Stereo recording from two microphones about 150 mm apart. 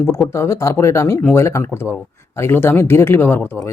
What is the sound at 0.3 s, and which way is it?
Speech, 20° left (ahead or behind).